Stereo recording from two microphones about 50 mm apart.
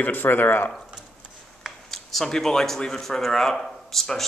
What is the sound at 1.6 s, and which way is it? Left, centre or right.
Speech, centre.